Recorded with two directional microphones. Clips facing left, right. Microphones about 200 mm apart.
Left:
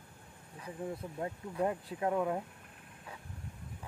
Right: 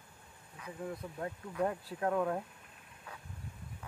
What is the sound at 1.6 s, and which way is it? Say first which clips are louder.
Speech: left 1 dB; 15° left (ahead or behind).